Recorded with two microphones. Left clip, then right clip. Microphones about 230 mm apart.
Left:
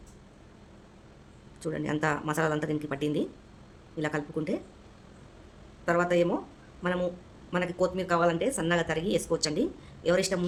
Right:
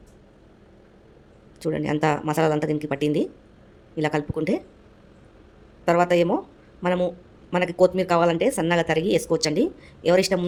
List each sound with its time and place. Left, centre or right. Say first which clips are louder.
1.6 s speech: right 7 dB; right
5.8 s speech: right 6 dB; right